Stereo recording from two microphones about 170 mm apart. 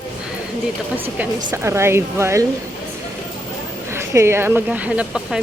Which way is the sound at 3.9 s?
15° right (ahead or behind).